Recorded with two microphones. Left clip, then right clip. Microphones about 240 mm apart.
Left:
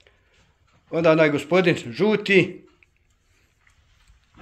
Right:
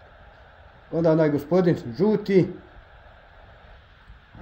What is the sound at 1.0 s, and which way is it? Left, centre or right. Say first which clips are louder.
A man's voice: left 3 dB; centre.